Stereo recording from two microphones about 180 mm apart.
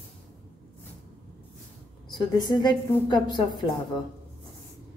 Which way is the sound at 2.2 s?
25° left (ahead or behind).